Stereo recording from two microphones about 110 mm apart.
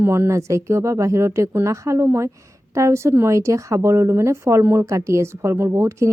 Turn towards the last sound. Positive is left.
turn(degrees=-25)  # may be behind; listen again after turning